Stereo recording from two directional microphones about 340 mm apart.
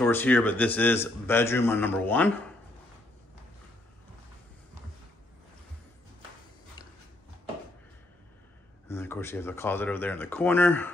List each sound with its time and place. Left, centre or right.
0.0 s a man's voice: centre
8.8 s speech: centre